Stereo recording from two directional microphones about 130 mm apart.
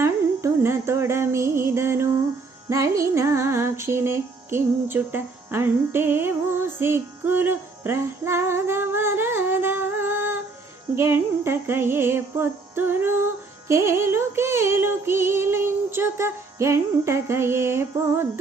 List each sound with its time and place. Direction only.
0.0 s music: 20° right (ahead or behind)
2.6 s female singing: 25° right (ahead or behind)
6.7 s music: 15° right (ahead or behind)
13.7 s female singing: 20° right (ahead or behind)